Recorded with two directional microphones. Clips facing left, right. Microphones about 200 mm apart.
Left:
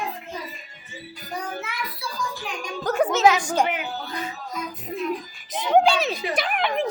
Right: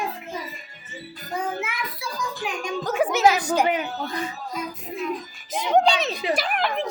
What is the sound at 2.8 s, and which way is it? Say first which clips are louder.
Music: left 2 dB; centre (ahead or behind).